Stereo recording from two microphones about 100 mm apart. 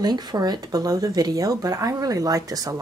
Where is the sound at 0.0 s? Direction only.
45° right (ahead or behind).